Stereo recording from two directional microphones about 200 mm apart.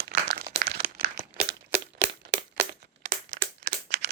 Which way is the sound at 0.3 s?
50° right (ahead or behind).